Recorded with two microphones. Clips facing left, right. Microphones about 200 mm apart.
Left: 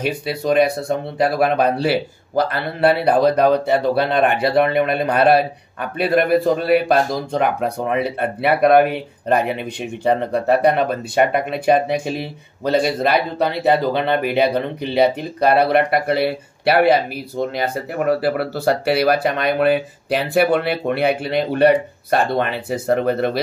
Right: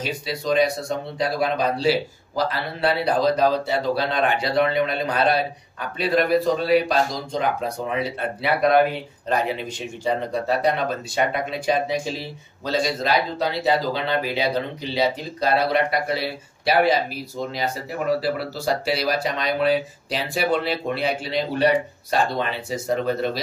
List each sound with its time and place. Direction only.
0.0 s speech: 60° left (ahead or behind)